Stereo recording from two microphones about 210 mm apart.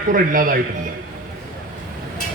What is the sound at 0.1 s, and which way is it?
Speech, 40° right (ahead or behind).